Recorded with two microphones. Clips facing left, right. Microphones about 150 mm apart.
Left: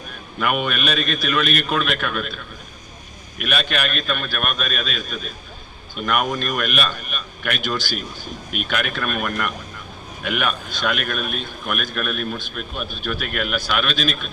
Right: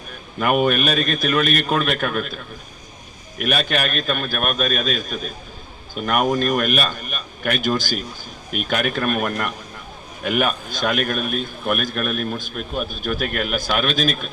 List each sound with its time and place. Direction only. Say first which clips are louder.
0.3 s a man's voice: right 5 dB; 40° right (ahead or behind)